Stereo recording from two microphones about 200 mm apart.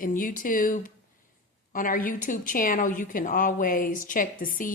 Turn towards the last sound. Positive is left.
turn(degrees=45)  # may be behind; listen again after turning